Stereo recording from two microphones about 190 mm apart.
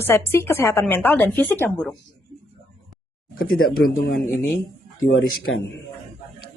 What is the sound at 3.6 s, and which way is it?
Speech, 50° left (ahead or behind).